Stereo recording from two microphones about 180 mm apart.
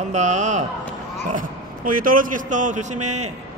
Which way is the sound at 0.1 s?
40° right (ahead or behind).